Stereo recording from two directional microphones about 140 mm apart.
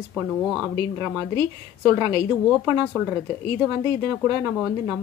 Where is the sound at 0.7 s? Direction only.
30° right (ahead or behind).